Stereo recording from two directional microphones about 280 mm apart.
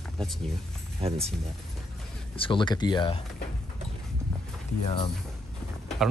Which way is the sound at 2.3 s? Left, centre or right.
Centre.